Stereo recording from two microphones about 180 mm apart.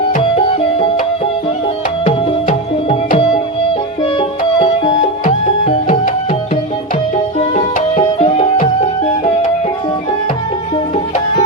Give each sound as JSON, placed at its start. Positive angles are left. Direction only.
{"t": 0.2, "sound": "music", "side_deg": 30}
{"t": 4.0, "sound": "music", "side_deg": 30}
{"t": 7.3, "sound": "music", "side_deg": 35}